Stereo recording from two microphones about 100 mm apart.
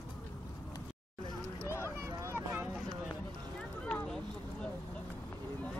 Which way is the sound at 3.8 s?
10° left (ahead or behind).